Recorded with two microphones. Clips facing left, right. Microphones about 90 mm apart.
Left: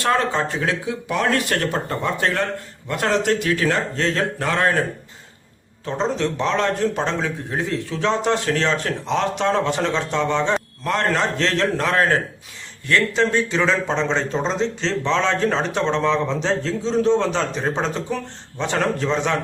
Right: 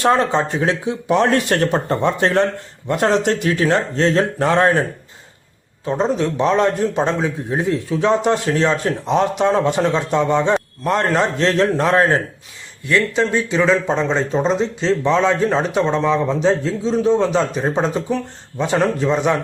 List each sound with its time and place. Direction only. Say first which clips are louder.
0.0 s speech: right 4 dB; 20° right (ahead or behind)
5.8 s a man's voice: right 4 dB; 15° right (ahead or behind)
12.9 s a man's voice: right 2 dB; 5° right (ahead or behind)